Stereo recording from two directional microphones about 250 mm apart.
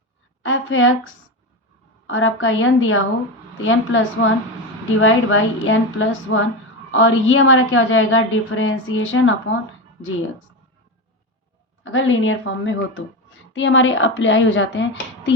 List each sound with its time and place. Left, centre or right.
0.4 s a sound: left
2.0 s a woman's voice: left
11.8 s a woman's voice: left